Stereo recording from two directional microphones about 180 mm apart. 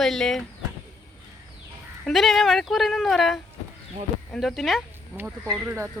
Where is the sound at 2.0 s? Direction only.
Centre (ahead or behind).